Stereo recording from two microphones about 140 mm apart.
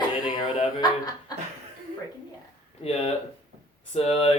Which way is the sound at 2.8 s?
50° left (ahead or behind).